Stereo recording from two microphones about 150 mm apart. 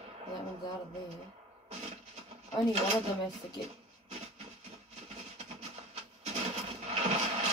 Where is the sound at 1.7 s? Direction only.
50° right (ahead or behind).